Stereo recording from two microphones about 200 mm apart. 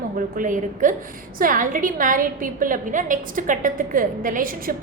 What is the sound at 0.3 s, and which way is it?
A woman's voice, 40° right (ahead or behind).